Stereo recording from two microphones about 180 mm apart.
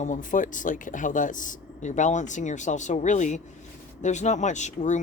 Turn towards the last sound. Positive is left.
turn(degrees=40)  # may be behind; listen again after turning